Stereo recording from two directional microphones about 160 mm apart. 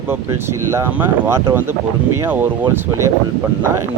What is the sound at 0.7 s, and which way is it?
Speech, 15° right (ahead or behind).